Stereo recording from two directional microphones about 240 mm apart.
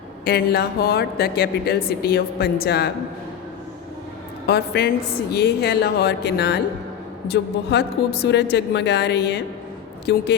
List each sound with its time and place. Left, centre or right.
0.3 s speech: left
4.4 s a woman's voice: left